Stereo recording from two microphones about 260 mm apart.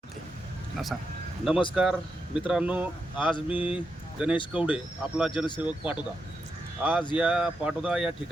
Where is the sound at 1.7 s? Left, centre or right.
Centre.